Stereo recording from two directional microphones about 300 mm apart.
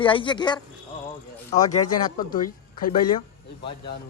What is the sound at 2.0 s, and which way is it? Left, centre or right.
Speech, centre.